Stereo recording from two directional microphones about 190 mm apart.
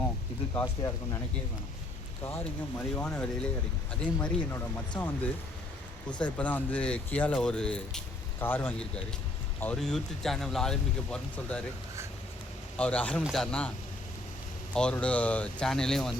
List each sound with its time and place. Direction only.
0.5 s speech: 20° left (ahead or behind)
2.2 s speech: 10° left (ahead or behind)
12.7 s speech: 5° left (ahead or behind)